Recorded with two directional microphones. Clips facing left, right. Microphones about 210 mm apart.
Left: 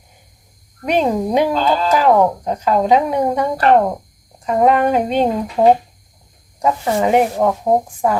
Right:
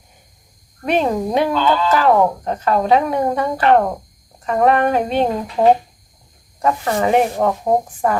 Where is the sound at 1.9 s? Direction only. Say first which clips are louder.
Left 2 dB; 10° left (ahead or behind).